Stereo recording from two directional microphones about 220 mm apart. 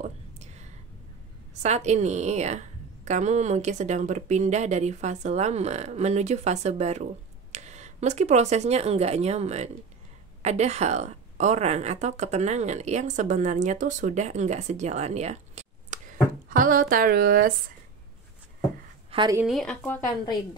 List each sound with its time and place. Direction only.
0.0 s whispering: 30° right (ahead or behind)
1.5 s speech: 30° right (ahead or behind)
19.0 s a sound: 20° right (ahead or behind)
19.3 s a woman's voice: centre (ahead or behind)